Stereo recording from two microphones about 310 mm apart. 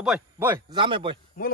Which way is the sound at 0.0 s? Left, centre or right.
Centre.